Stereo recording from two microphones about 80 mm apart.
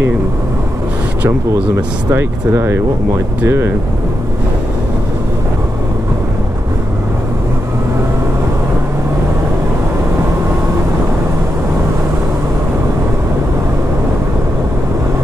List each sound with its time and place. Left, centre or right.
2.1 s speech: right